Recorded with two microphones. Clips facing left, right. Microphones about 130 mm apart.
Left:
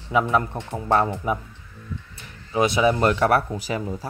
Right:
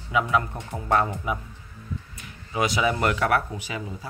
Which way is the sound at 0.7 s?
25° left (ahead or behind).